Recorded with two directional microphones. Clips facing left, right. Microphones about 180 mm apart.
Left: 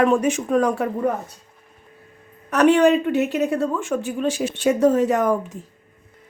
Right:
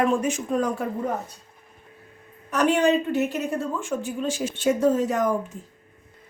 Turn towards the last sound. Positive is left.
turn(degrees=70)  # may be behind; listen again after turning